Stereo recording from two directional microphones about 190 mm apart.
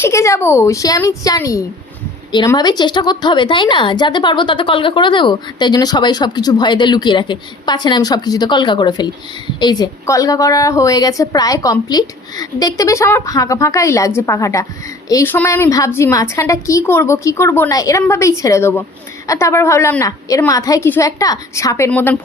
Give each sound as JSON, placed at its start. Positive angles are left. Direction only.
{"t": 0.0, "sound": "a woman's voice", "side_deg": 15}